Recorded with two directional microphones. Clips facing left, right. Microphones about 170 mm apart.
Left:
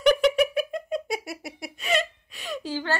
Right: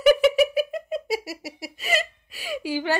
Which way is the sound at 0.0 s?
5° right (ahead or behind).